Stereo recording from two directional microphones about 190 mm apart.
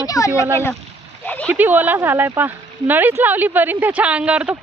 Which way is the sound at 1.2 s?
5° left (ahead or behind).